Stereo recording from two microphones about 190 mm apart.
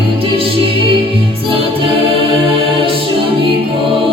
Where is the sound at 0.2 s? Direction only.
30° right (ahead or behind).